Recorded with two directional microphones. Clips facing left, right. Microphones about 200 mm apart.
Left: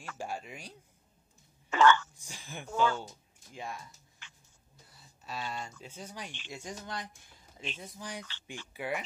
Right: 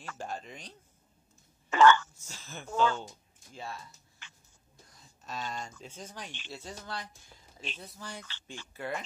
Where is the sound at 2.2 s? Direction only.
15° left (ahead or behind).